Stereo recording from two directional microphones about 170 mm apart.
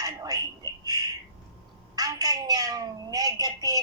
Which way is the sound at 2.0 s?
20° right (ahead or behind).